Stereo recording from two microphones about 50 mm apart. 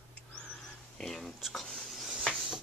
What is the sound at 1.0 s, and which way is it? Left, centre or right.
Speech, centre.